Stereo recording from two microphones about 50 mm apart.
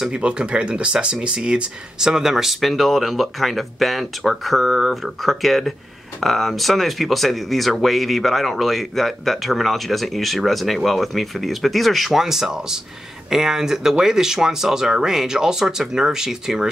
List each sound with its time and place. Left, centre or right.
0.1 s speech: centre